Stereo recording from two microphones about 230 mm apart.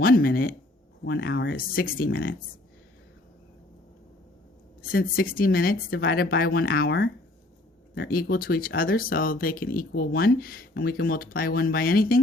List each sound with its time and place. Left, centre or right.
0.0 s speech: left
1.3 s speech: left
1.5 s speech: left
4.8 s speech: left